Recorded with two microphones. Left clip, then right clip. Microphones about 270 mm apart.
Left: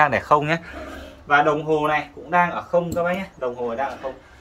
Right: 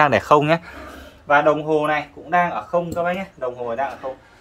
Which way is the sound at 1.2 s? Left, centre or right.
Centre.